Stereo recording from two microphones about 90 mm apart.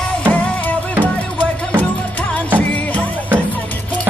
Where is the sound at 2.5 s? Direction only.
15° left (ahead or behind).